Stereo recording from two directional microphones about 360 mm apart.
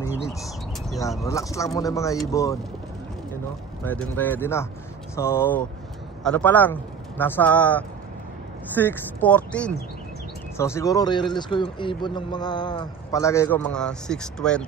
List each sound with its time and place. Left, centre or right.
0.0 s speech: centre
3.8 s speech: centre